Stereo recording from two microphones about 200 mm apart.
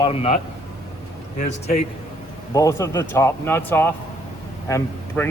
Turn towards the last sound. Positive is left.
turn(degrees=15)  # may be behind; listen again after turning